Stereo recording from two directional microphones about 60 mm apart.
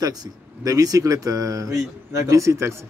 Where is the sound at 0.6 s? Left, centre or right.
Right.